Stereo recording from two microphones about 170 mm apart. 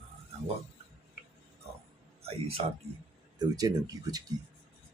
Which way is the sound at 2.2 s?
35° right (ahead or behind).